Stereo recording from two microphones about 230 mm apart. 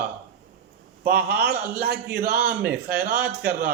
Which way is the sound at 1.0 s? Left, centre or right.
Right.